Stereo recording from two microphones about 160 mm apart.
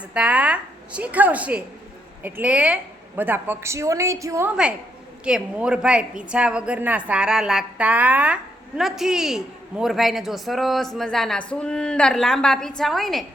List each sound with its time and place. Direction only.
0.1 s a woman's voice: 10° right (ahead or behind)
5.2 s speech: 5° right (ahead or behind)